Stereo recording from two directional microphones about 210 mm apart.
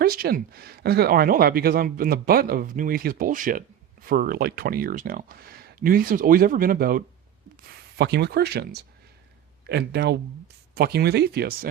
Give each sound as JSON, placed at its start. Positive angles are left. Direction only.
{"t": 0.0, "sound": "speech", "side_deg": -45}